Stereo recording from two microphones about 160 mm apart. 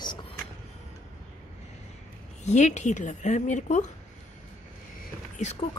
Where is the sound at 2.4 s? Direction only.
45° left (ahead or behind).